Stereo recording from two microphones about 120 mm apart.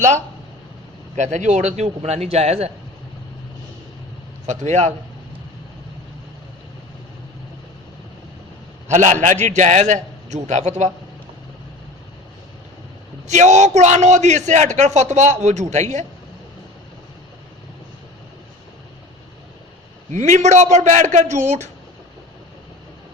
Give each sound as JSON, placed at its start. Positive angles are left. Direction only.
{"t": 1.1, "sound": "a man's voice", "side_deg": -80}
{"t": 4.4, "sound": "a man's voice", "side_deg": -75}
{"t": 8.9, "sound": "a man's voice", "side_deg": -85}
{"t": 13.2, "sound": "a man's voice", "side_deg": -75}
{"t": 20.1, "sound": "a man's voice", "side_deg": -80}